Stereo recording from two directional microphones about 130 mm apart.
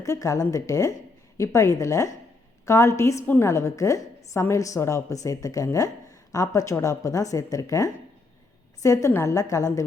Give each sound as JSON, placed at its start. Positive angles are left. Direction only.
{"t": 0.0, "sound": "a woman's voice", "side_deg": 25}